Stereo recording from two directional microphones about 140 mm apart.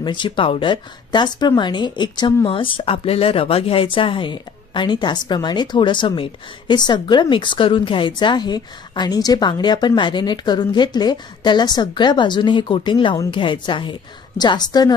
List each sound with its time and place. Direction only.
0.0 s a woman's voice: 35° left (ahead or behind)